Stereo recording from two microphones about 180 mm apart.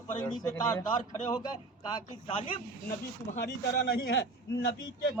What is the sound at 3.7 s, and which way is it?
Speech, 65° left (ahead or behind).